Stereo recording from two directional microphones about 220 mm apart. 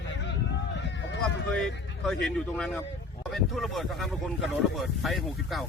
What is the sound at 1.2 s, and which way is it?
Speech, 5° left (ahead or behind).